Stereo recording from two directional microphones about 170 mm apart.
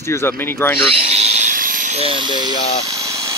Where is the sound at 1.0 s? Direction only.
40° right (ahead or behind).